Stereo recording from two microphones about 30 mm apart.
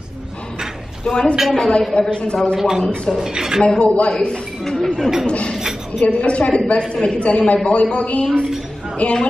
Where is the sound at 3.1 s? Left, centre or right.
Right.